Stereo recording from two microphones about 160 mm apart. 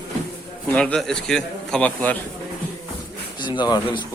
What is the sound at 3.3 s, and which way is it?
Speech, 30° left (ahead or behind).